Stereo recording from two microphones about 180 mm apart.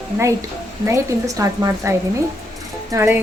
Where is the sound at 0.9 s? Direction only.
20° right (ahead or behind).